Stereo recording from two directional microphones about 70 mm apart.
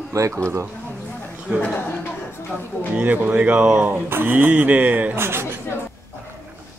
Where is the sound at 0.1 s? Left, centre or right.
Right.